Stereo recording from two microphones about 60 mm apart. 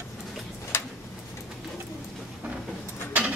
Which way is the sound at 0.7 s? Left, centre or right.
Left.